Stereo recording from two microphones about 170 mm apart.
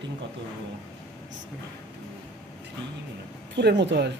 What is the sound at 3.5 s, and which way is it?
Speech, 90° right.